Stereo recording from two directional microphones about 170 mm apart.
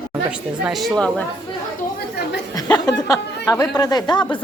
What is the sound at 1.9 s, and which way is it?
Chatter, 75° left (ahead or behind).